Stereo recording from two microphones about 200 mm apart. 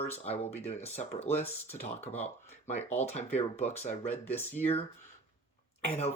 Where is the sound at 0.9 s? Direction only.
30° left (ahead or behind).